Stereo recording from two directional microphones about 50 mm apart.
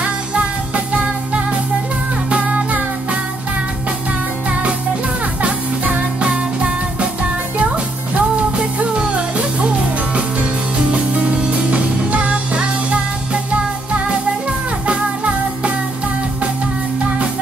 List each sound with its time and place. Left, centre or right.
0.0 s music: right
5.4 s music: right
14.9 s music: right